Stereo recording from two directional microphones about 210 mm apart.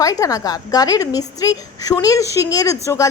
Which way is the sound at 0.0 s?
15° left (ahead or behind).